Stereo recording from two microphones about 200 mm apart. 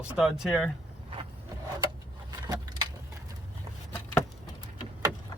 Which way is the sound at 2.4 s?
20° right (ahead or behind).